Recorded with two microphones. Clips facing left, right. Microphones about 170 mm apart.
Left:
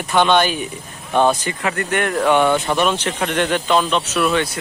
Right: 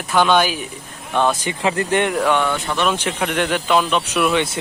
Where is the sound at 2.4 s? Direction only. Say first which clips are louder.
Left 5 dB; 25° left (ahead or behind).